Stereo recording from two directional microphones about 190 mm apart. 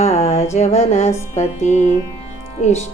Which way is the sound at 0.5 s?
35° left (ahead or behind).